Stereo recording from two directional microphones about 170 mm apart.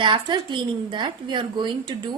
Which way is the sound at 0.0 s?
30° right (ahead or behind).